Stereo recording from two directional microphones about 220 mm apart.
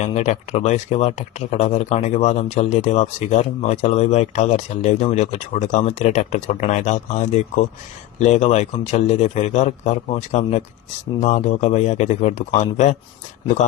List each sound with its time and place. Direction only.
0.0 s speech: 30° left (ahead or behind)